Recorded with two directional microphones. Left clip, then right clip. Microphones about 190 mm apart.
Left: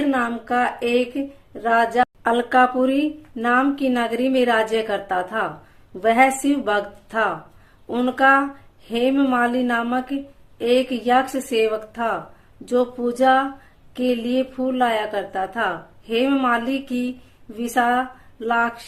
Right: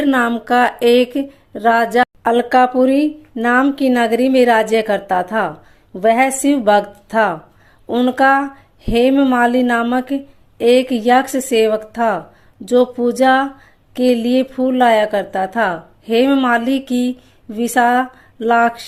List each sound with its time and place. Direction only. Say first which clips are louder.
0.0 s speech: right 6 dB; 50° right (ahead or behind)
2.2 s speech: right 4 dB; 35° right (ahead or behind)